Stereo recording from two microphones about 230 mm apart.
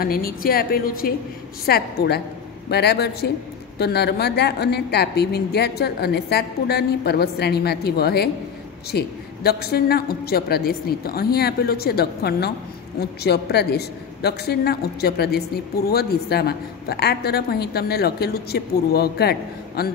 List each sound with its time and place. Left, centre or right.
0.0 s a woman's voice: left